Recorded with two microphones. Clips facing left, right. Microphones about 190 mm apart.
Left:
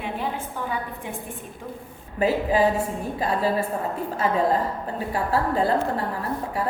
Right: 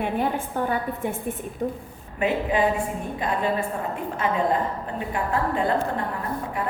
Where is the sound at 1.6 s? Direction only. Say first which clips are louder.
Right 10 dB; 45° right (ahead or behind).